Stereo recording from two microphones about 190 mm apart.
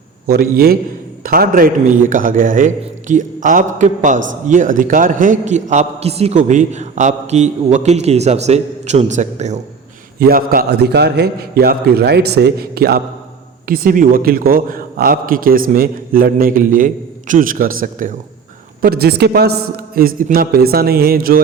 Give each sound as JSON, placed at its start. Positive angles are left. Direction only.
{"t": 0.3, "sound": "a man's voice", "side_deg": -55}
{"t": 10.2, "sound": "a man's voice", "side_deg": -50}